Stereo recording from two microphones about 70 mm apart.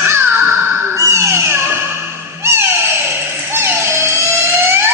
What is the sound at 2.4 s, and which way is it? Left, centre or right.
Music, right.